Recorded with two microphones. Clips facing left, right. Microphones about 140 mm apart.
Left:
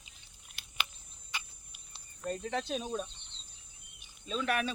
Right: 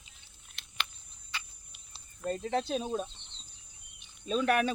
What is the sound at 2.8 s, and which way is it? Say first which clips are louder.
Speech: right 3 dB; 30° right (ahead or behind).